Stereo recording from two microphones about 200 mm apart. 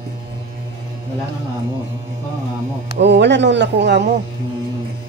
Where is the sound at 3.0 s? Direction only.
60° right (ahead or behind).